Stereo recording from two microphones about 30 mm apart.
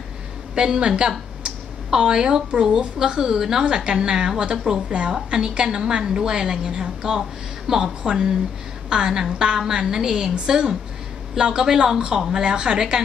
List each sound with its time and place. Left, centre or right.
0.6 s a woman's voice: right; by 8.1 s centre
8.1 s a woman's voice: right